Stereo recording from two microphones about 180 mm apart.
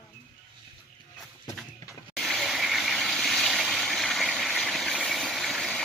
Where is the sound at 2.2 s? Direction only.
Centre (ahead or behind).